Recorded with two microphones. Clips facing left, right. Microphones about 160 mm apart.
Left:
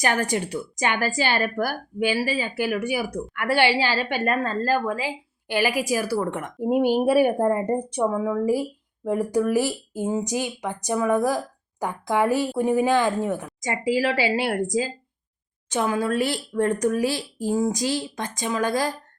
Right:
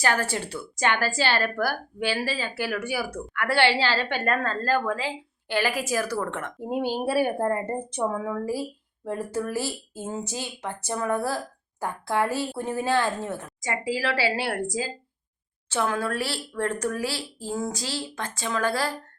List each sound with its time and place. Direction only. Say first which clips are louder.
0.0 s speech: left 2 dB; 15° left (ahead or behind)